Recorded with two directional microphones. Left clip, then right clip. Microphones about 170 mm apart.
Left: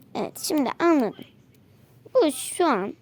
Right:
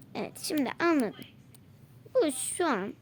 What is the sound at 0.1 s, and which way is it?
Speech, 30° left (ahead or behind).